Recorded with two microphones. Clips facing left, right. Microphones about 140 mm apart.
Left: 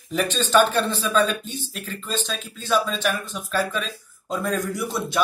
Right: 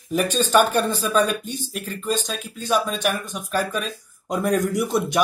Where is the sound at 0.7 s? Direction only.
10° right (ahead or behind).